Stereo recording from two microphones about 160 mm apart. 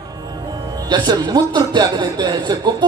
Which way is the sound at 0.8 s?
25° right (ahead or behind).